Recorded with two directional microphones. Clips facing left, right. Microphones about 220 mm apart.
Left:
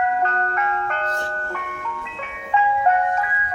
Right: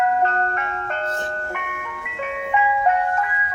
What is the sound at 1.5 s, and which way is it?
Ice cream truck, 15° right (ahead or behind).